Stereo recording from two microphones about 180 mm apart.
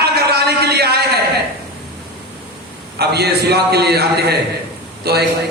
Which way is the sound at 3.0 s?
65° right (ahead or behind).